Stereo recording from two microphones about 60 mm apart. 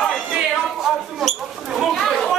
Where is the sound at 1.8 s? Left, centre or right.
Centre.